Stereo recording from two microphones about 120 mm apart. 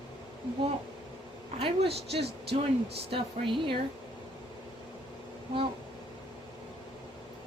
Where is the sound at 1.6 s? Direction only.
55° right (ahead or behind).